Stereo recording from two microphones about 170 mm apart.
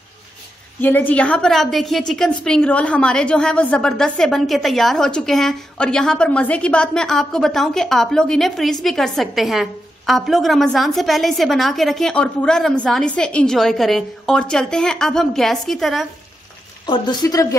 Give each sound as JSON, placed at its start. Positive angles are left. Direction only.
{"t": 0.7, "sound": "a woman's voice", "side_deg": 10}
{"t": 16.8, "sound": "speech", "side_deg": 25}